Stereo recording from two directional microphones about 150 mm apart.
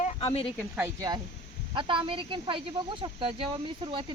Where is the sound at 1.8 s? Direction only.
35° right (ahead or behind).